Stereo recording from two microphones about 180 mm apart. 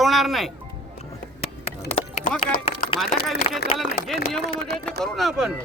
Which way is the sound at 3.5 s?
30° left (ahead or behind).